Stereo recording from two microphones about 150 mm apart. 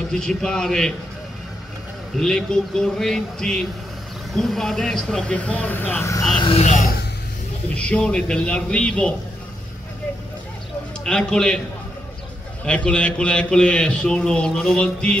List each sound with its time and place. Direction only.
0.1 s speech: 5° left (ahead or behind)
2.1 s speech: 5° left (ahead or behind)
6.3 s speech: 30° left (ahead or behind)
7.7 s a man's voice: 10° left (ahead or behind)
11.1 s speech: 5° left (ahead or behind)
12.6 s a man's voice: 10° left (ahead or behind)